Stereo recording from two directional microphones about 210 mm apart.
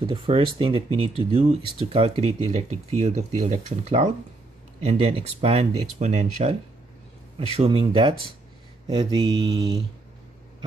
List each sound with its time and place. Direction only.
0.0 s speech: 25° right (ahead or behind)